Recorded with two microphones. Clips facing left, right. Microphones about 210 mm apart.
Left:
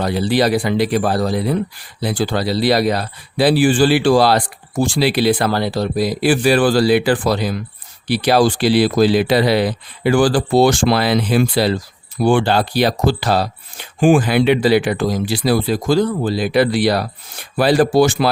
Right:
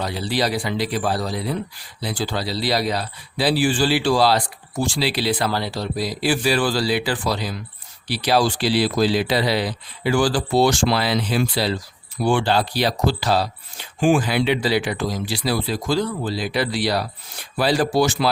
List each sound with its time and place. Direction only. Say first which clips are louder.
0.0 s speech: left 7 dB; 55° left (ahead or behind)